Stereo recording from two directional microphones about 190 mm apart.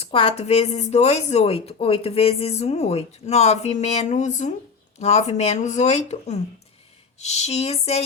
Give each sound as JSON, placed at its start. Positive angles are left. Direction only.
{"t": 0.0, "sound": "a woman's voice", "side_deg": 30}